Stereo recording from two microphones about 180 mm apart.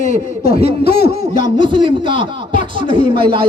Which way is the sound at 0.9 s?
35° right (ahead or behind).